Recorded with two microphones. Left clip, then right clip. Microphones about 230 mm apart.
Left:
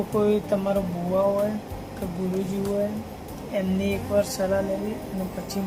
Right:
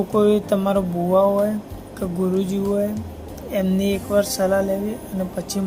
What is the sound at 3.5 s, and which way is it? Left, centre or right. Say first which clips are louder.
Speech: right 5 dB; right.